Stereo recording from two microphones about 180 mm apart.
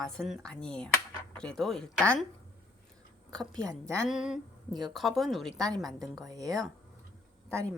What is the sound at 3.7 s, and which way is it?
Speech, 15° right (ahead or behind).